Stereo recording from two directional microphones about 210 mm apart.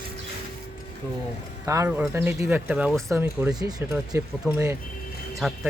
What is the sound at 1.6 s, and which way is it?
Speech, 15° right (ahead or behind).